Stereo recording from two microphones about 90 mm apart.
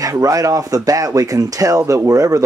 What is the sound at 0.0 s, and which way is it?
Speech, 40° right (ahead or behind).